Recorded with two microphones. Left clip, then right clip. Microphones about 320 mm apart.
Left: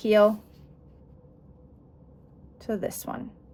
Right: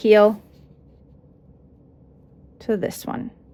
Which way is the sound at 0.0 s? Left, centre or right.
Right.